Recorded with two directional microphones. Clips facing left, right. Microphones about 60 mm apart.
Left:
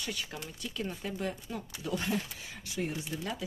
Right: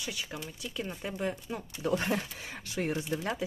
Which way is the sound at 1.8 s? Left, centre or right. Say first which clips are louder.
Right 4 dB; right.